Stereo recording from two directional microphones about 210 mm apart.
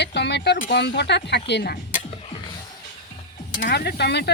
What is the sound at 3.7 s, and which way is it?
Speech, 50° left (ahead or behind).